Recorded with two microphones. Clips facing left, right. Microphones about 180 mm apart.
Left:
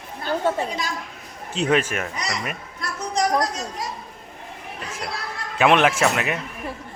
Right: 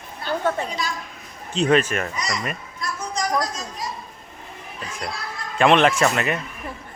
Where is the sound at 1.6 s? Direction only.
10° left (ahead or behind).